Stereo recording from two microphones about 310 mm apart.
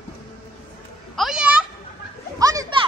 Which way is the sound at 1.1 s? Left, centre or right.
Centre.